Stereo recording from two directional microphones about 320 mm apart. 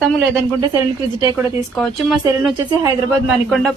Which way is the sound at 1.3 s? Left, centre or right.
Centre.